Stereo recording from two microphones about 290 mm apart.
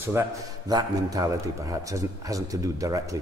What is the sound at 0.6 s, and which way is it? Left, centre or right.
A man's voice, centre.